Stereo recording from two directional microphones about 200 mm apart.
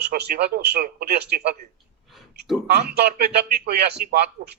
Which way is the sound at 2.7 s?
55° right (ahead or behind).